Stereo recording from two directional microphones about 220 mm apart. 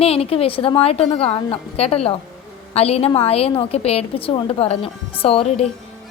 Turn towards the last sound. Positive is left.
turn(degrees=25)  # may be behind; listen again after turning